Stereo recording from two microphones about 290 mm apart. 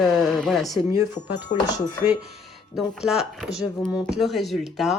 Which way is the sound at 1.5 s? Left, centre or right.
Left.